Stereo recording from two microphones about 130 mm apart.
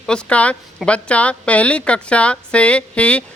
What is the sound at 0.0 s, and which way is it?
Speech, 5° left (ahead or behind).